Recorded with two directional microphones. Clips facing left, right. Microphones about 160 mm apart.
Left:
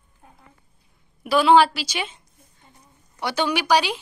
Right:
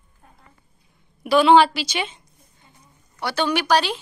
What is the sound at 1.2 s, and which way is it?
Speech, 5° left (ahead or behind).